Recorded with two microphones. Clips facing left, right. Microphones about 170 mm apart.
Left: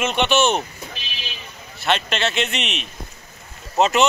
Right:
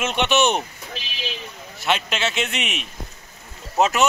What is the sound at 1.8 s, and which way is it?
A man's voice, 5° right (ahead or behind).